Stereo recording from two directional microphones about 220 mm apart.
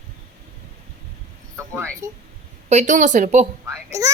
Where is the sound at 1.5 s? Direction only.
15° right (ahead or behind).